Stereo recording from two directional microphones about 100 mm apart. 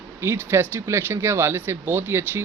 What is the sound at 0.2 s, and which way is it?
Speech, 25° right (ahead or behind).